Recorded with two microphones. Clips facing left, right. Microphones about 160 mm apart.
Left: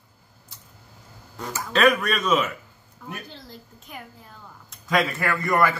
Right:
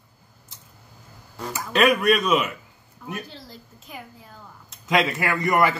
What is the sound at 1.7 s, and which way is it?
Speech, 10° right (ahead or behind).